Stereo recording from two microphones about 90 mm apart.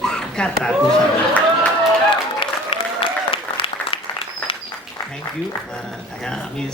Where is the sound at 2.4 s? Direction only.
80° left.